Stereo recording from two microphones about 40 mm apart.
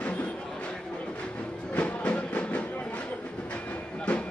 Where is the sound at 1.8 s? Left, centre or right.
Left.